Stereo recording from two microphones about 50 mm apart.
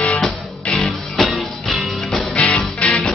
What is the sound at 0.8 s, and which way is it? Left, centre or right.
Music, centre.